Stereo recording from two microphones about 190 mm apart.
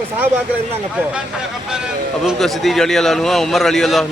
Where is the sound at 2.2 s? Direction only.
Centre (ahead or behind).